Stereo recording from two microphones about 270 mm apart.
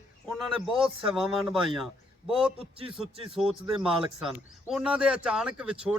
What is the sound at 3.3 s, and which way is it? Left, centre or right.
Speech, centre.